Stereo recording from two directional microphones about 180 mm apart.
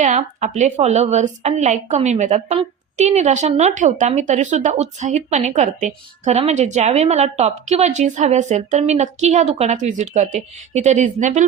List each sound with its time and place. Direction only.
0.0 s speech: 40° right (ahead or behind)